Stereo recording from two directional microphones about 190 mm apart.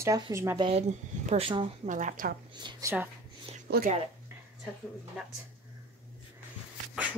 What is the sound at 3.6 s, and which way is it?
Speech, 55° right (ahead or behind).